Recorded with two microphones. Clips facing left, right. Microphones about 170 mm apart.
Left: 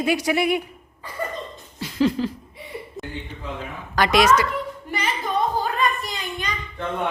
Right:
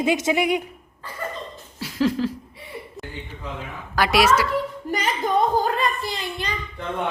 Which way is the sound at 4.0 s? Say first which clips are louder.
Left 1 dB; 5° right (ahead or behind).